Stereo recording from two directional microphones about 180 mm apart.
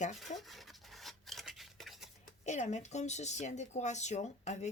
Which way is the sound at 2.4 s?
40° left (ahead or behind).